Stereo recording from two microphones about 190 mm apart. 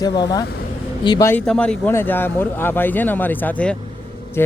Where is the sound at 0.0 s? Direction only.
20° left (ahead or behind).